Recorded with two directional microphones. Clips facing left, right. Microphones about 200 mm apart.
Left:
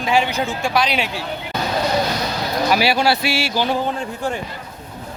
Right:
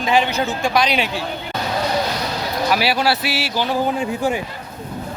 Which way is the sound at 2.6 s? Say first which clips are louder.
Left 1 dB; centre (ahead or behind).